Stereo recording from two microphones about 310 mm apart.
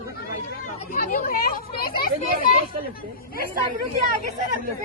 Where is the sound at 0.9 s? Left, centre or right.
Left.